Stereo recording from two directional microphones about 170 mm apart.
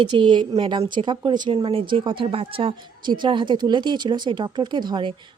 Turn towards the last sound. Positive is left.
turn(degrees=-25)  # may be behind; listen again after turning